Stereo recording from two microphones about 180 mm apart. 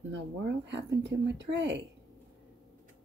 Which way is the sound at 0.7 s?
75° right (ahead or behind).